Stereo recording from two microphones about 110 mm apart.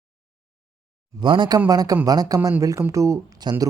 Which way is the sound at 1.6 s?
35° right (ahead or behind).